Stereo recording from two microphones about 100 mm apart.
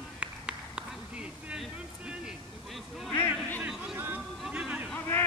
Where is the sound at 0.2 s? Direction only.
10° right (ahead or behind).